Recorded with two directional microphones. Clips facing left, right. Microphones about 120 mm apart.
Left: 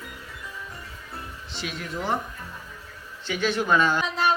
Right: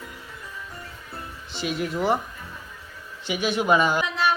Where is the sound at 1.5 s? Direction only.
Centre (ahead or behind).